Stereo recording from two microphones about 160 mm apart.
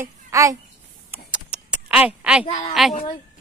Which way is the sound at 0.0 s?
20° right (ahead or behind).